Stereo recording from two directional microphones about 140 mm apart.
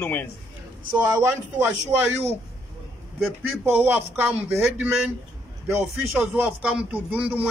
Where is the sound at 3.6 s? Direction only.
15° right (ahead or behind).